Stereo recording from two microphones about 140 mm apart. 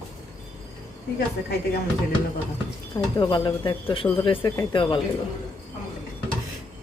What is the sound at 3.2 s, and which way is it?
Speech, 35° left (ahead or behind).